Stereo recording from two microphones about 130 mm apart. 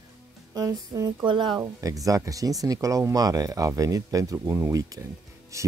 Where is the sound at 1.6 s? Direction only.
25° right (ahead or behind).